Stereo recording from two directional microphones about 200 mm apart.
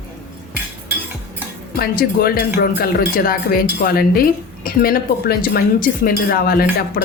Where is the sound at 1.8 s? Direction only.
50° left (ahead or behind).